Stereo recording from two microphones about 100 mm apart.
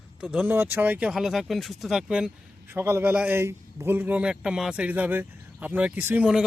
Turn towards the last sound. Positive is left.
turn(degrees=-20)  # may be behind; listen again after turning